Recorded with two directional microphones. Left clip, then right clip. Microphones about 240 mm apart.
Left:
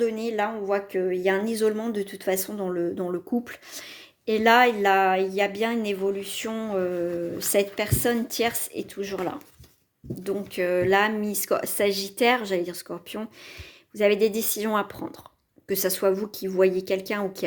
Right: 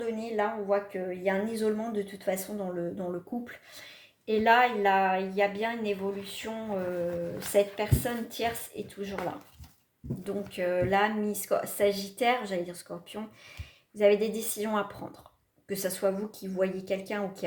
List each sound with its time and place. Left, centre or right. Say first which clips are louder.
0.0 s a woman's voice: left 5 dB; left
10.2 s speech: left 5 dB; left